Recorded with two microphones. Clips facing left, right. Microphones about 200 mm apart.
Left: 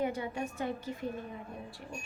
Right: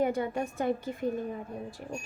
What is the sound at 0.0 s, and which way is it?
A woman's voice, 50° right (ahead or behind).